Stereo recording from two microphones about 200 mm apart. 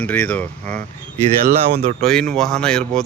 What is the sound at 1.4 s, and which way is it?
Speech, 50° right (ahead or behind).